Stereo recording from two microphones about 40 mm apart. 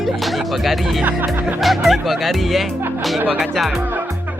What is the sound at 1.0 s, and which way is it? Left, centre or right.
Music, right.